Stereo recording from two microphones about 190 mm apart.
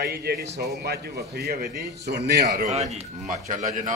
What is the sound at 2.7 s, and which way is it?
Speech, 35° right (ahead or behind).